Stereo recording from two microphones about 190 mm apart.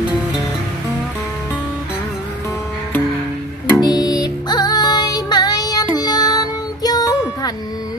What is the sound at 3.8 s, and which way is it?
Music, 20° left (ahead or behind).